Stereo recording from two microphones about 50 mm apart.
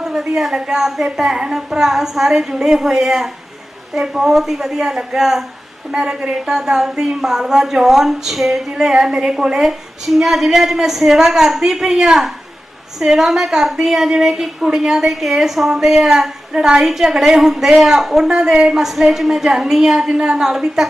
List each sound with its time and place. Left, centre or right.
0.0 s a woman's voice: centre
8.7 s a woman's voice: centre